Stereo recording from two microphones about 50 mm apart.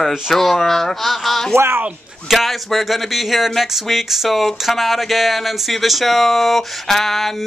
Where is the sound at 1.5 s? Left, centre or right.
Right.